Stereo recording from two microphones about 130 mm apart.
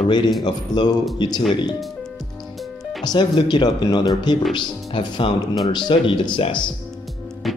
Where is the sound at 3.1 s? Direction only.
35° left (ahead or behind).